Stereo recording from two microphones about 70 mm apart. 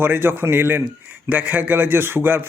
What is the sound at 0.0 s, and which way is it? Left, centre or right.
A man's voice, right.